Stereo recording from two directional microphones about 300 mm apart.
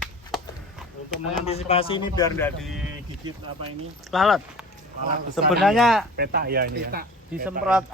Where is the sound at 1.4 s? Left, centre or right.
Left; by 2.8 s centre.